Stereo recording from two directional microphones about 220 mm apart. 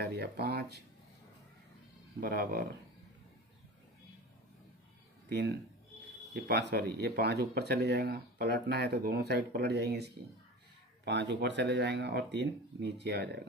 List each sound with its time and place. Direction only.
0.0 s speech: 45° right (ahead or behind)
2.1 s speech: 45° right (ahead or behind)
5.3 s speech: 50° right (ahead or behind)